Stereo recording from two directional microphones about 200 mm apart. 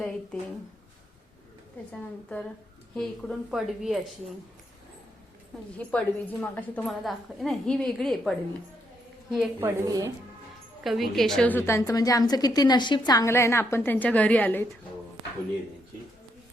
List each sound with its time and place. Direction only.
2.9 s a woman's voice: 5° left (ahead or behind)
5.7 s a woman's voice: 5° left (ahead or behind); by 10.1 s 15° right (ahead or behind)
10.8 s a woman's voice: centre (ahead or behind)